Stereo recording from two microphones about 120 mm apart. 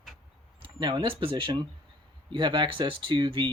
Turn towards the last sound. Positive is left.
turn(degrees=-45)  # may be behind; listen again after turning